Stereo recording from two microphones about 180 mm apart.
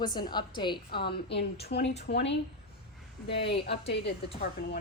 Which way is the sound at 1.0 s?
70° left (ahead or behind).